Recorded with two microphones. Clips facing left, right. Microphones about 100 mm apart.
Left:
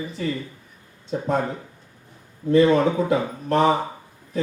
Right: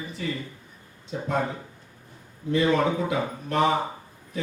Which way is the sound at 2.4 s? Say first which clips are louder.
Left 6 dB; 40° left (ahead or behind).